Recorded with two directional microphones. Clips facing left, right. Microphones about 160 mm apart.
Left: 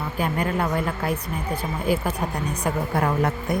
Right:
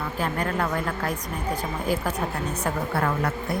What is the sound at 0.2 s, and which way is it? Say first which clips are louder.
A woman's voice: left 3 dB; 10° left (ahead or behind).